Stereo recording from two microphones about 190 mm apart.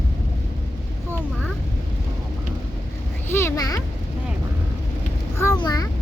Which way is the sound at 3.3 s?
15° left (ahead or behind).